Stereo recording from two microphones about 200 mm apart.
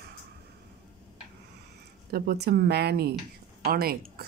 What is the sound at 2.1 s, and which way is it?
Speech, 50° right (ahead or behind).